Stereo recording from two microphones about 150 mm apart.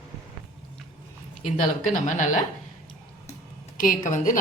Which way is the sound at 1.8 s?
55° left (ahead or behind).